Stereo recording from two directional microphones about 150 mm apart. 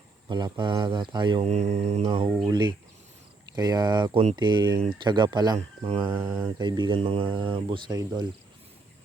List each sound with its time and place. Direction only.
0.3 s speech: 30° right (ahead or behind)
1.5 s mantra: 45° right (ahead or behind)
2.5 s speech: 30° right (ahead or behind)
5.5 s speech: 40° right (ahead or behind)
6.1 s speech: 15° right (ahead or behind)
6.6 s speech: 30° right (ahead or behind)